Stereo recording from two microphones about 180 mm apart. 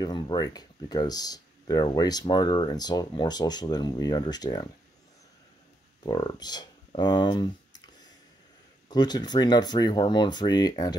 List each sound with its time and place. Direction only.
0.0 s speech: 25° left (ahead or behind)
6.0 s speech: 25° left (ahead or behind)
8.8 s speech: 25° left (ahead or behind)